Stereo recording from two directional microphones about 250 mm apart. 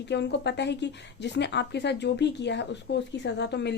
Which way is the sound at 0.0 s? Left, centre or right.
Left.